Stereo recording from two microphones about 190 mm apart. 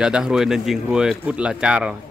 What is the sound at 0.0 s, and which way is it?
Speech, 5° right (ahead or behind).